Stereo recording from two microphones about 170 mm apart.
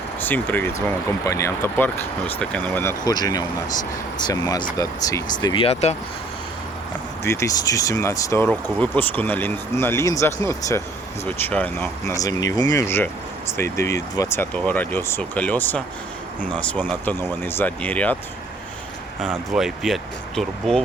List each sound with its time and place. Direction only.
0.2 s speech: 10° left (ahead or behind)
3.1 s speech: 20° left (ahead or behind)
5.6 s speech: 40° left (ahead or behind)
7.3 s speech: 20° left (ahead or behind)
19.5 s speech: centre (ahead or behind)